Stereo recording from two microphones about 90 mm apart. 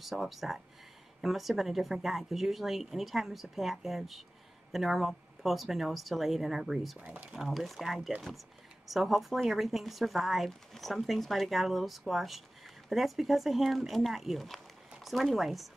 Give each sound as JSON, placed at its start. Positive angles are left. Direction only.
{"t": 0.0, "sound": "speech", "side_deg": 0}
{"t": 7.1, "sound": "speech", "side_deg": -15}
{"t": 7.3, "sound": "speech", "side_deg": 0}